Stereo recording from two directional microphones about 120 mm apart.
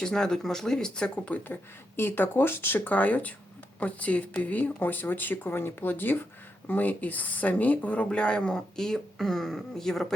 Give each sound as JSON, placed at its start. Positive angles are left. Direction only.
{"t": 0.0, "sound": "speech", "side_deg": 5}